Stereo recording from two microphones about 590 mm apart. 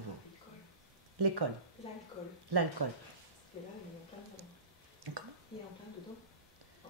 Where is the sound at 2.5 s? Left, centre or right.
Right.